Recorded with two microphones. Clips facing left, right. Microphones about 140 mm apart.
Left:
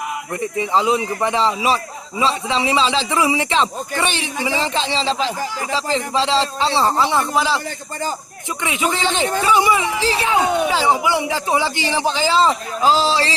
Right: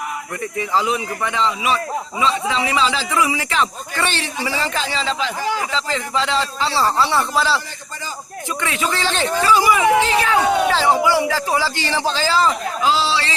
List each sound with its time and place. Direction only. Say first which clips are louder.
0.5 s a man's voice: left 2 dB; 25° left (ahead or behind)
8.6 s a man's voice: left 2 dB; 20° left (ahead or behind)
10.2 s speech: right 1 dB; 15° left (ahead or behind)
12.8 s speech: left 3 dB; 40° left (ahead or behind)